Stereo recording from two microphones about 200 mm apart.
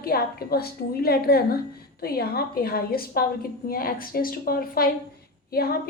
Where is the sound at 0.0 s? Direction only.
50° left (ahead or behind).